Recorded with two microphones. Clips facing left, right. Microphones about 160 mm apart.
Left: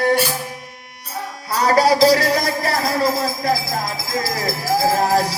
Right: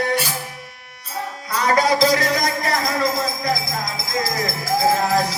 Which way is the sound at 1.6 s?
35° left (ahead or behind).